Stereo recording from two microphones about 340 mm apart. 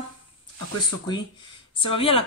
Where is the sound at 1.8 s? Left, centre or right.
Centre.